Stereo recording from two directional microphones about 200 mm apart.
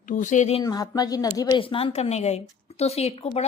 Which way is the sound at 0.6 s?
20° left (ahead or behind).